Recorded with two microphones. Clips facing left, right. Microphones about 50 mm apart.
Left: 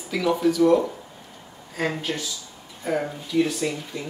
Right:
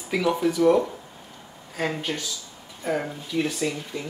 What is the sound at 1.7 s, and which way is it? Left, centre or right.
Speech, centre.